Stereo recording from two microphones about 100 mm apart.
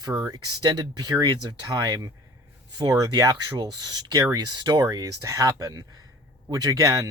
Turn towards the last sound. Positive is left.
turn(degrees=-35)  # may be behind; listen again after turning